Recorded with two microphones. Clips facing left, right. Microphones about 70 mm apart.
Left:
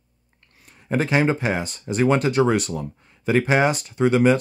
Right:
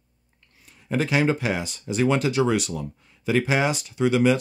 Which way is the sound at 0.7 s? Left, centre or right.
Left.